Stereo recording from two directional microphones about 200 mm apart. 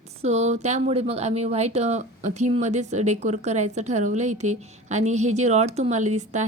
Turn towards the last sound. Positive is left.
turn(degrees=-35)  # may be behind; listen again after turning